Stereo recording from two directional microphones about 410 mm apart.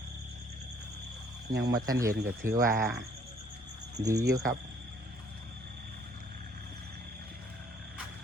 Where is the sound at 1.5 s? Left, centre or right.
Right.